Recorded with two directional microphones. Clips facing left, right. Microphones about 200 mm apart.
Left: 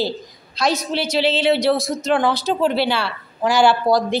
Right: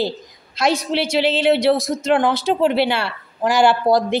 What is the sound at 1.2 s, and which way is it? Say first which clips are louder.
Speech: right 1 dB; 55° right (ahead or behind).